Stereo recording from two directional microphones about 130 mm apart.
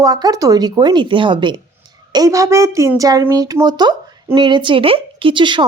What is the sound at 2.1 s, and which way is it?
Speech, 25° right (ahead or behind).